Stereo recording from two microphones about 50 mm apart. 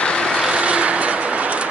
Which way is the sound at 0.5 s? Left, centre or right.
Right.